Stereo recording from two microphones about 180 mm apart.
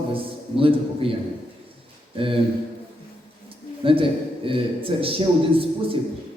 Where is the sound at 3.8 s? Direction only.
30° right (ahead or behind).